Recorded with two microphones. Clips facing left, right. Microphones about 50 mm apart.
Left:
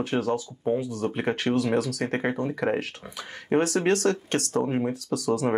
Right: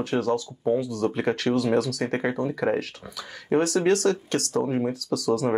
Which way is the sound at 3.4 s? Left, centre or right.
Left.